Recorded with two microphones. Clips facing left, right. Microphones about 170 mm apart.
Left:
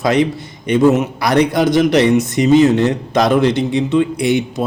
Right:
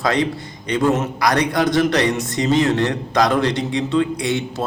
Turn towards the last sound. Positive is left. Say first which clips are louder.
# left 5 dB
turn(degrees=20)  # may be behind; listen again after turning